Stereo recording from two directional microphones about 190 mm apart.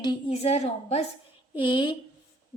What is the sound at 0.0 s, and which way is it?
A woman's voice, 25° left (ahead or behind).